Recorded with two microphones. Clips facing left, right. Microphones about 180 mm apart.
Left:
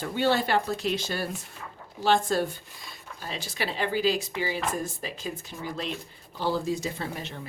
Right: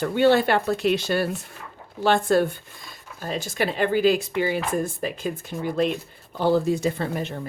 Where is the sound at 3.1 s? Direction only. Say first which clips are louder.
Right 8 dB; 50° right (ahead or behind).